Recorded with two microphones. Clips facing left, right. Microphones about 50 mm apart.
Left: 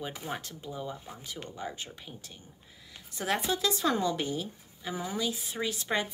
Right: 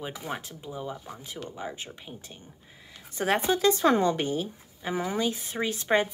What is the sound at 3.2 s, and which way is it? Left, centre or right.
Speech, right.